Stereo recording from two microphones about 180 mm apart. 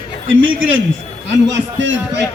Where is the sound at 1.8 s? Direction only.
90° right.